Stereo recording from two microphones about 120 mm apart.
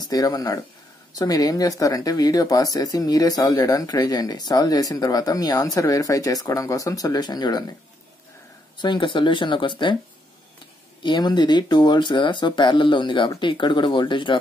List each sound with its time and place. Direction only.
0.1 s speech: 30° left (ahead or behind)
8.7 s speech: 40° left (ahead or behind)
11.0 s speech: 40° left (ahead or behind)